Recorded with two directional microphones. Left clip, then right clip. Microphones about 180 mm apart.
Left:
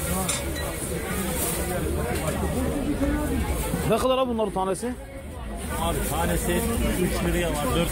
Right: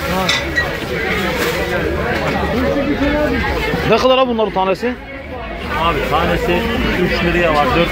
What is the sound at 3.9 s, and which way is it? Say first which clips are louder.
Speech: right 10 dB; 5° left (ahead or behind).